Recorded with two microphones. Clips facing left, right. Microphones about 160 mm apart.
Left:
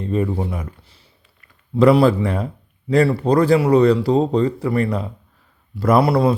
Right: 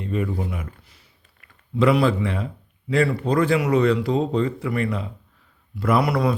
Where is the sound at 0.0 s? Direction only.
35° left (ahead or behind).